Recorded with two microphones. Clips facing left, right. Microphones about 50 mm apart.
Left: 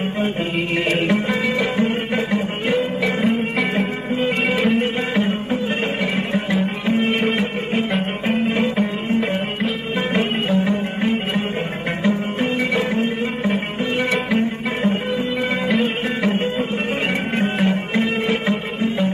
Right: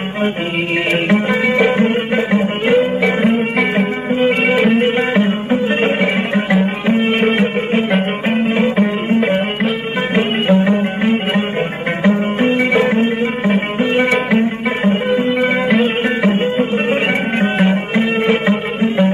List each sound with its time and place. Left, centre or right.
1.0 s music: right
4.8 s music: right
10.1 s music: right
15.7 s music: centre